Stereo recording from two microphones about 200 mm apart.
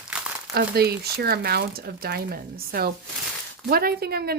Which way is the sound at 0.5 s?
50° right (ahead or behind).